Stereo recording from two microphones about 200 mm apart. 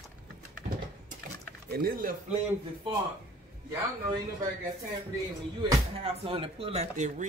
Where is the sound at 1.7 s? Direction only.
50° right (ahead or behind).